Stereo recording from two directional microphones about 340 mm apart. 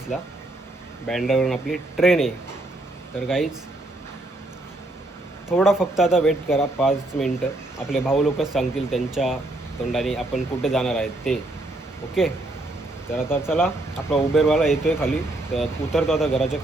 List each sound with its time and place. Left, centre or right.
0.1 s speech: centre
5.5 s speech: centre
13.1 s speech: centre